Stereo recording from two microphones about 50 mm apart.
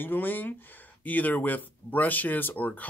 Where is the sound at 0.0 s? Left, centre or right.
Left.